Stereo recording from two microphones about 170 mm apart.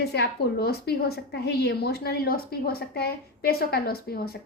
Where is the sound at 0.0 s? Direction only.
75° left (ahead or behind).